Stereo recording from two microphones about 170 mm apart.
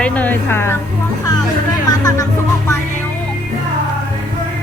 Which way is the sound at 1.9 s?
20° left (ahead or behind).